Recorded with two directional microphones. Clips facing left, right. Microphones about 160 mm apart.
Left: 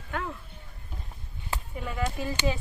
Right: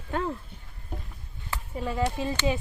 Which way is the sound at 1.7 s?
30° right (ahead or behind).